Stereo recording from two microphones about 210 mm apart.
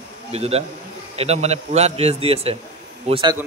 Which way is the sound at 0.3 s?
30° right (ahead or behind).